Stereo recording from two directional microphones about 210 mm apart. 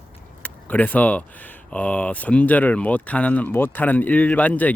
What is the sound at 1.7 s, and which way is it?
Speech, 5° left (ahead or behind).